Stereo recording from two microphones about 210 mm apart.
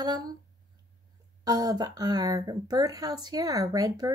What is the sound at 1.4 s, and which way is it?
A woman's voice, 15° right (ahead or behind).